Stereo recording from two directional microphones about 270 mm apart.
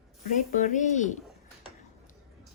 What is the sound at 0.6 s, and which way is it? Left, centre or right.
Speech, left.